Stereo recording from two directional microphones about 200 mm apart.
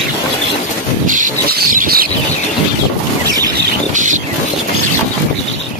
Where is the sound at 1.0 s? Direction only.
40° right (ahead or behind).